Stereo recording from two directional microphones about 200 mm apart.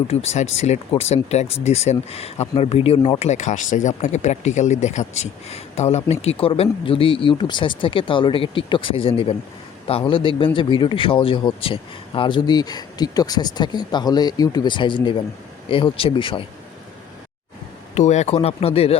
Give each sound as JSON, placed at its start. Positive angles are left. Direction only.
{"t": 0.1, "sound": "speech", "side_deg": 30}
{"t": 17.9, "sound": "speech", "side_deg": 35}